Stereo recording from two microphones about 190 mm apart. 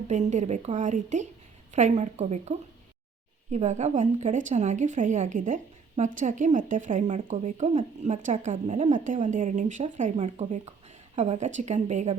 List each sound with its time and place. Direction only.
0.1 s a woman's voice: 40° right (ahead or behind)